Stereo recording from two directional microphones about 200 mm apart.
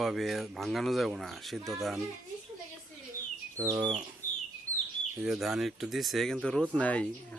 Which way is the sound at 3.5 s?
15° right (ahead or behind).